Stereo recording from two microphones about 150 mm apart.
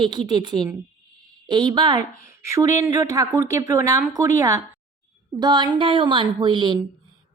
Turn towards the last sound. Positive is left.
turn(degrees=-30)  # may be behind; listen again after turning